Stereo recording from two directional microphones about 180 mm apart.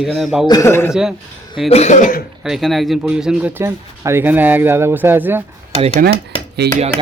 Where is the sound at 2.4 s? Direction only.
Centre (ahead or behind).